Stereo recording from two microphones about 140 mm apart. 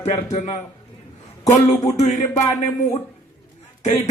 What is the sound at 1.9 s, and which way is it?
Speech, 55° left (ahead or behind).